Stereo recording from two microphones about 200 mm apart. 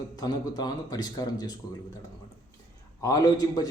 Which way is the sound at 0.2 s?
20° left (ahead or behind).